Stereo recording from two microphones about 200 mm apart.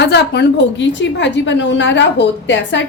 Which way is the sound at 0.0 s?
55° left (ahead or behind).